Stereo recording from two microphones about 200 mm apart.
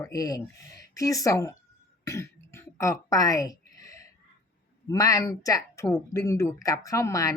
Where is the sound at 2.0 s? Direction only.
15° left (ahead or behind).